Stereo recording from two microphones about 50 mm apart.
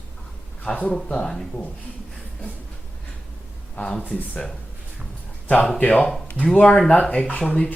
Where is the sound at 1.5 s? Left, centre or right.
Left.